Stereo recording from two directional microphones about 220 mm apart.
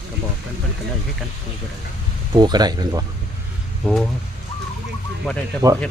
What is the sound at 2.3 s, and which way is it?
Speech, 20° right (ahead or behind).